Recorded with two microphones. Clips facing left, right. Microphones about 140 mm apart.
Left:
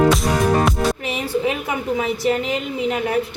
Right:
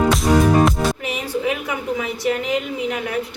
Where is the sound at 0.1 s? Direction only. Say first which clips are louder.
Right 2 dB; centre (ahead or behind).